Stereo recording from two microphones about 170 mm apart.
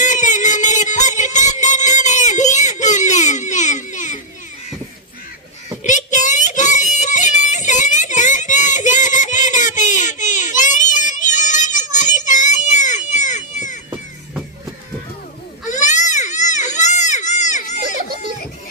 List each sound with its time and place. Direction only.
0.0 s music: 45° left (ahead or behind)
5.8 s a sound: 45° left (ahead or behind)
15.7 s baby cry: 45° left (ahead or behind)